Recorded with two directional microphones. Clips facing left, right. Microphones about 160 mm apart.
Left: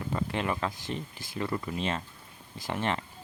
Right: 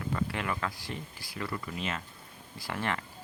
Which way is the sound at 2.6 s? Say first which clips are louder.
Left 3 dB; 20° left (ahead or behind).